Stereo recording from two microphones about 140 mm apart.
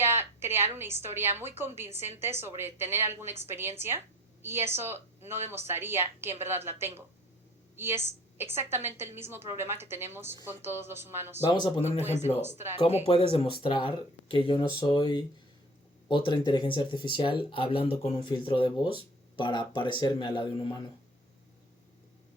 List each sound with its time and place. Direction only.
0.0 s a woman's voice: 15° right (ahead or behind)
12.7 s speech: 45° left (ahead or behind)